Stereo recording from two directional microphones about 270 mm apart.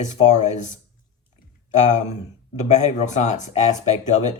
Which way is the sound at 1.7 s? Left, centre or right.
Left.